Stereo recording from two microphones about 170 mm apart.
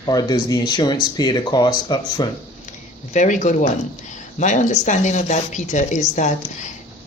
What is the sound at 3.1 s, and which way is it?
A woman's voice, 45° left (ahead or behind).